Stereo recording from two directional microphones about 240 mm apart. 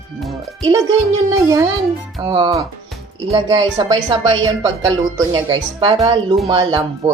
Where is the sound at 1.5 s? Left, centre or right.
Centre.